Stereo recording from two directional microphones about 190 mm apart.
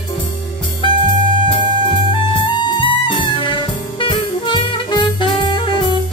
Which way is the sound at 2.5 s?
25° left (ahead or behind).